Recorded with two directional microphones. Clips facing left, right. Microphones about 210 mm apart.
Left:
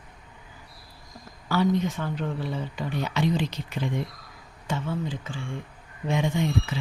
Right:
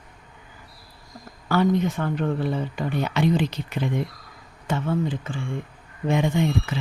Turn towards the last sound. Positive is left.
turn(degrees=-55)  # may be behind; listen again after turning